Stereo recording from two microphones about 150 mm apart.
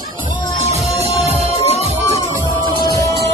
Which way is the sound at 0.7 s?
45° right (ahead or behind).